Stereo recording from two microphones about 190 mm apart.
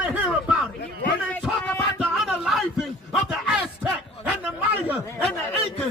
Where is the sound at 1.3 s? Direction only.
5° left (ahead or behind).